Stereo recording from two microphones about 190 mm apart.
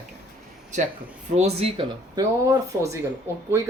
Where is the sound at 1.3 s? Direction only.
35° right (ahead or behind).